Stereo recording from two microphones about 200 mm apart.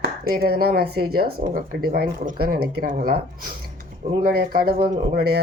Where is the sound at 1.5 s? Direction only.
50° right (ahead or behind).